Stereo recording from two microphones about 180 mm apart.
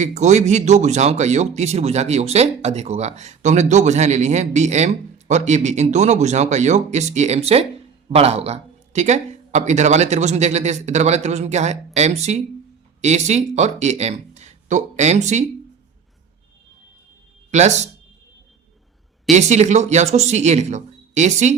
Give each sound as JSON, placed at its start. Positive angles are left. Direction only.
{"t": 0.0, "sound": "speech", "side_deg": -40}
{"t": 17.5, "sound": "speech", "side_deg": -40}
{"t": 19.3, "sound": "speech", "side_deg": -40}